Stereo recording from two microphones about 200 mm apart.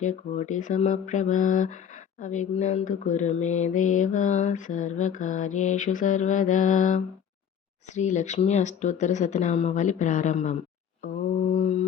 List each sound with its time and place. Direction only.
0.0 s speech: 40° left (ahead or behind)
11.0 s mantra: 40° left (ahead or behind)